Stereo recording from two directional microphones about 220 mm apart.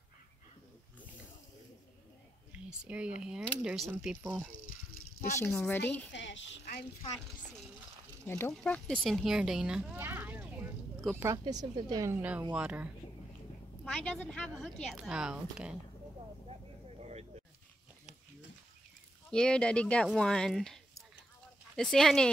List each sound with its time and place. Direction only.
2.7 s a woman's voice: 5° right (ahead or behind)
5.4 s speech: 10° left (ahead or behind)
5.8 s a woman's voice: 55° left (ahead or behind)
8.3 s a woman's voice: 10° left (ahead or behind)
17.0 s a sound: 30° right (ahead or behind)
19.3 s a woman's voice: 5° left (ahead or behind)